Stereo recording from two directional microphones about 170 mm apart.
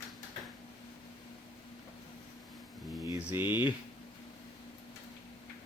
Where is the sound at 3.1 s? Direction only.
15° right (ahead or behind).